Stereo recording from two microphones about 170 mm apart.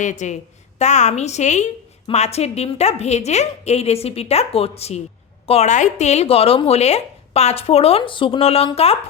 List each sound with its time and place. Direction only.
0.0 s a woman's voice: 45° left (ahead or behind)